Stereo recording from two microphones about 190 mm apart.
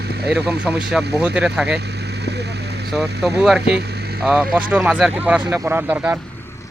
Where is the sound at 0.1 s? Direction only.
60° right (ahead or behind).